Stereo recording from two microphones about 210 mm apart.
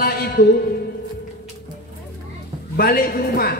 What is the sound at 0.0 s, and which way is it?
Music, 45° left (ahead or behind).